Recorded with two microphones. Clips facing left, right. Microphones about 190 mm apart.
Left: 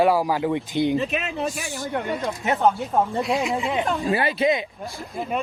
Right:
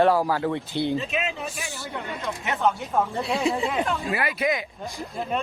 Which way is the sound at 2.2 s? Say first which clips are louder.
Left 3 dB; 35° left (ahead or behind).